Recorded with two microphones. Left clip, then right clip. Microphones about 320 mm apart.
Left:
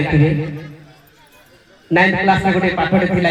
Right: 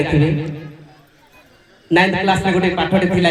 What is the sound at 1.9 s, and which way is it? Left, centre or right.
A man's voice, left.